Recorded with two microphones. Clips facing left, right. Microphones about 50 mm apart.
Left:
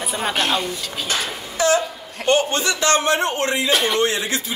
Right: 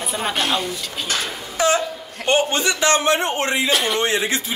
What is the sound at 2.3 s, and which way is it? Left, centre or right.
A man's voice, centre.